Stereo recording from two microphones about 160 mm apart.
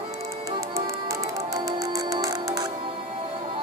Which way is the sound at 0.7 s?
20° right (ahead or behind).